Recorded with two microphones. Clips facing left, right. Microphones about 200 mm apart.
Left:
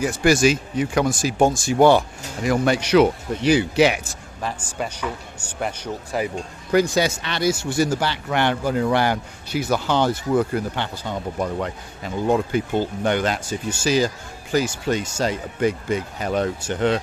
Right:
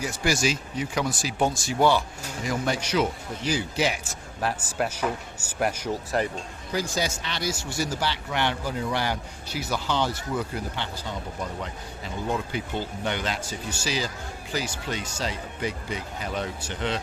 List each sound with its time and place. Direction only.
0.0 s speech: 55° left (ahead or behind)
4.4 s a man's voice: 5° right (ahead or behind)
6.7 s speech: 65° left (ahead or behind); by 17.0 s 50° left (ahead or behind)